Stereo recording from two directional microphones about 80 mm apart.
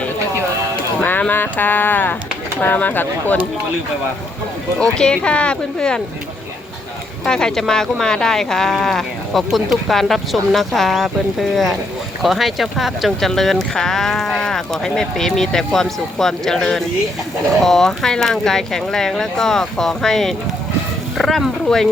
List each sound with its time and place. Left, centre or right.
1.3 s speech: left
4.8 s speech: centre
7.3 s speech: centre